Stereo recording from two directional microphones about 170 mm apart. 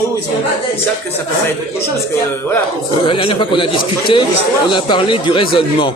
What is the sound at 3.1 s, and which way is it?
A man's voice, 30° left (ahead or behind).